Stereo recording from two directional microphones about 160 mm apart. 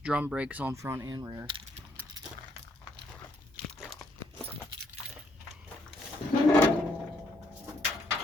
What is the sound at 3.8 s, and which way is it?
Crumpling, centre (ahead or behind).